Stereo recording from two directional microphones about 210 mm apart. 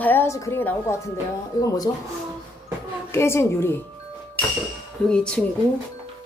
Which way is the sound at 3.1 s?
10° left (ahead or behind).